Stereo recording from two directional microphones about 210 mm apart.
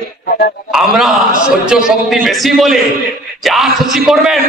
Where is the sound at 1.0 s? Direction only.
Centre (ahead or behind).